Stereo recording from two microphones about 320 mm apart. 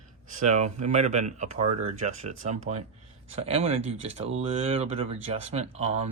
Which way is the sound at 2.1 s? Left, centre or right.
Right.